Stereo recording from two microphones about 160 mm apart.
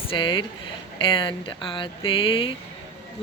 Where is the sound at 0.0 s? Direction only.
30° left (ahead or behind).